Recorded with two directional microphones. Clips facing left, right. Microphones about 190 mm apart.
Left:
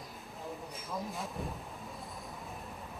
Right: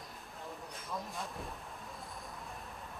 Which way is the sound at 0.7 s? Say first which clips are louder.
Left 1 dB; centre (ahead or behind).